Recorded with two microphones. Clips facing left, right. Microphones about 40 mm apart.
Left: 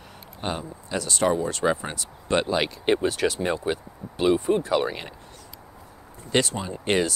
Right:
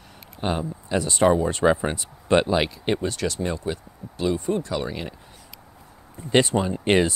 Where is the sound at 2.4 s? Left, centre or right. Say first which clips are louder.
Right 2 dB; centre.